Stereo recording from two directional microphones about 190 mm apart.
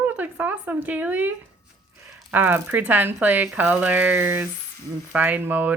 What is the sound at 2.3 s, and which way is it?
Speech, 10° right (ahead or behind).